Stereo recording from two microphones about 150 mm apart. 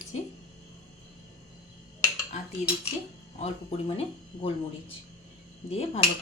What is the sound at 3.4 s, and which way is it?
Speech, 45° left (ahead or behind).